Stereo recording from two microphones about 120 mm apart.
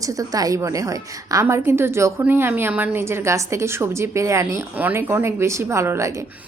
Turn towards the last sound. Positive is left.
turn(degrees=-25)  # may be behind; listen again after turning